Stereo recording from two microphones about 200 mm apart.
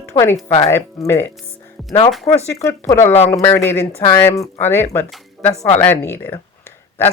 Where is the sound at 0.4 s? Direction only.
30° left (ahead or behind).